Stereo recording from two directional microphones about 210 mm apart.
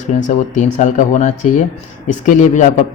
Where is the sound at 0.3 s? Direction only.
35° left (ahead or behind).